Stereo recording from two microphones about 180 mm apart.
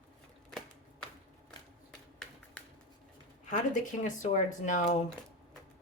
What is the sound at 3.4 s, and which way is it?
Speech, 45° left (ahead or behind).